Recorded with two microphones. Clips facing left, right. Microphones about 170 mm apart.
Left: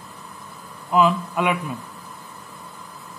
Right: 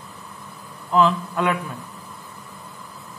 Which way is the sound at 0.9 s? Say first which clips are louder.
Even; 10° left (ahead or behind).